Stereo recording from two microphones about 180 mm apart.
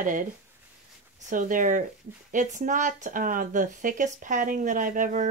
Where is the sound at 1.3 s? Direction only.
45° right (ahead or behind).